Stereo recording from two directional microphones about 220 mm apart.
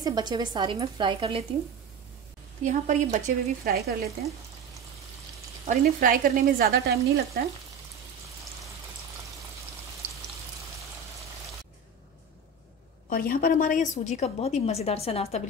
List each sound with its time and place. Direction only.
0.0 s speech: 20° right (ahead or behind)
2.6 s speech: 35° right (ahead or behind)
3.6 s speech: 45° right (ahead or behind)
5.7 s speech: 35° right (ahead or behind)
13.1 s a woman's voice: 40° left (ahead or behind)